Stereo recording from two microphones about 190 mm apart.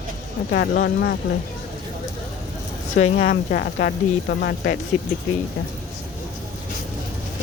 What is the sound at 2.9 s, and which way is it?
Speech, 35° left (ahead or behind).